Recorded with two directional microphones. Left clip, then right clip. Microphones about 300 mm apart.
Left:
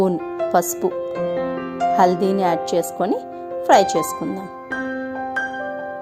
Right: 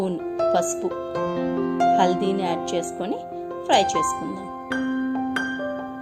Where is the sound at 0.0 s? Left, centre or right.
Left.